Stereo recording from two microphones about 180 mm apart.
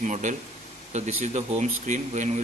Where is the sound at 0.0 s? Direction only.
40° right (ahead or behind).